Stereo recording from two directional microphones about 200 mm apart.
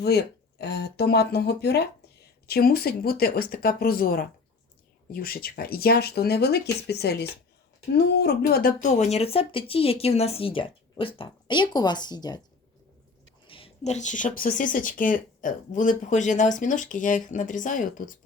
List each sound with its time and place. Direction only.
0.0 s speech: 55° left (ahead or behind); by 12.4 s 20° left (ahead or behind)
13.5 s speech: 30° left (ahead or behind)